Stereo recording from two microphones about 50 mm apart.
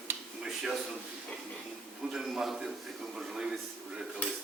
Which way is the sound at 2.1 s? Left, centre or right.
Centre.